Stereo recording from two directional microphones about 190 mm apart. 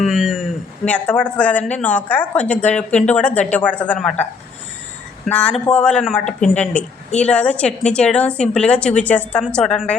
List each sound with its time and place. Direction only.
0.0 s a man's voice: centre (ahead or behind)